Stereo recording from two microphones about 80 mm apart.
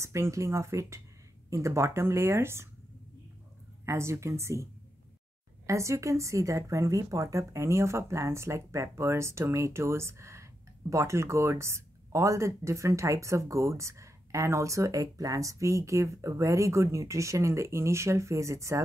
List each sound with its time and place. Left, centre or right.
0.0 s a woman's voice: right
3.8 s a woman's voice: right
5.7 s a woman's voice: right